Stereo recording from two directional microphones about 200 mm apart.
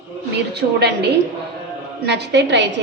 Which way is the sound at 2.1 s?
60° right (ahead or behind).